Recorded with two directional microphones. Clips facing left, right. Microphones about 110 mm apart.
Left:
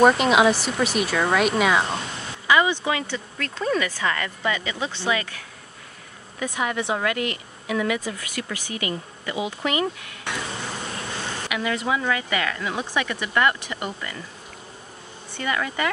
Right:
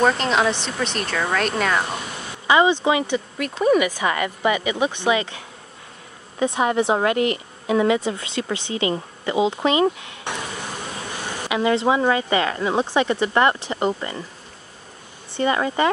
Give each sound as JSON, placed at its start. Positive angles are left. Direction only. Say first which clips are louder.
{"t": 0.0, "sound": "speech", "louder": "left 3 dB", "side_deg": 10}
{"t": 2.4, "sound": "speech", "louder": "right 4 dB", "side_deg": -25}
{"t": 6.4, "sound": "speech", "louder": "right 7 dB", "side_deg": -25}
{"t": 11.4, "sound": "speech", "louder": "right 8 dB", "side_deg": -25}
{"t": 15.3, "sound": "speech", "louder": "right 6 dB", "side_deg": -30}